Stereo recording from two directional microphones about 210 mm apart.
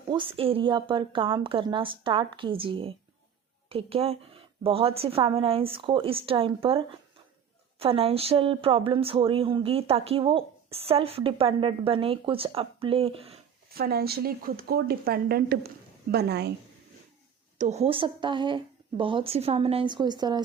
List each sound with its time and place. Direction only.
0.1 s speech: 25° right (ahead or behind)
13.7 s a woman's voice: 45° right (ahead or behind)
17.6 s speech: 30° right (ahead or behind)